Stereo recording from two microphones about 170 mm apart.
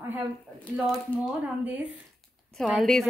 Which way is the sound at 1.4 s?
10° right (ahead or behind).